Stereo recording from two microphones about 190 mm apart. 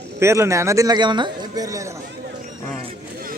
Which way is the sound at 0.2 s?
15° right (ahead or behind).